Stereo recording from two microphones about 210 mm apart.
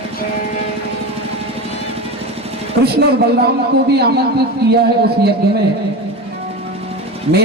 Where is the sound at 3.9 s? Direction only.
50° right (ahead or behind).